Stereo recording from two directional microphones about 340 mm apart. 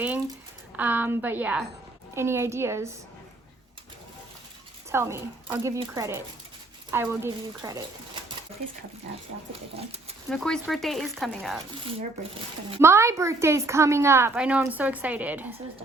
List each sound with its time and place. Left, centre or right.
0.8 s a woman's voice: centre
4.9 s a woman's voice: centre
10.2 s speech: centre
12.7 s a woman's voice: centre